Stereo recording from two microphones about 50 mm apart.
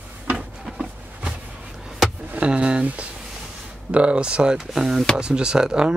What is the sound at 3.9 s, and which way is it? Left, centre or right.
Speech, right.